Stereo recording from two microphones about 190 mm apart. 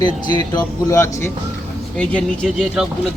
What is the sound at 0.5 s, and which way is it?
Speech, 15° left (ahead or behind).